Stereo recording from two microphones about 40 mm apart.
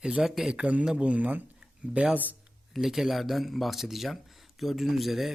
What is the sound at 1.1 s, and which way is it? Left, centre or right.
Speech, right.